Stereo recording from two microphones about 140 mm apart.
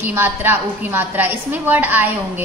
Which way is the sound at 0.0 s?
15° right (ahead or behind).